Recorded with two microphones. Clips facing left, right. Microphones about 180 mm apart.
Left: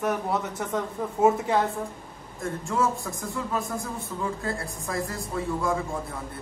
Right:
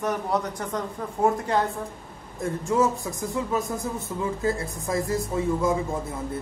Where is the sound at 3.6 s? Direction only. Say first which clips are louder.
Right 3 dB; centre (ahead or behind).